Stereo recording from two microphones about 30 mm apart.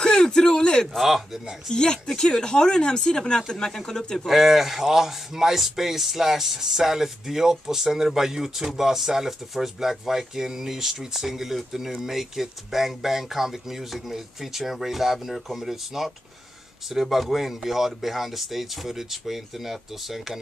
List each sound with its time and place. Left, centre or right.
0.0 s a sound: left
0.9 s speech: centre
1.7 s speech: left
4.3 s speech: centre